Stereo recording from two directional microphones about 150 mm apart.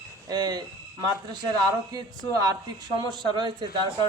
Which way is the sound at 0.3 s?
25° right (ahead or behind).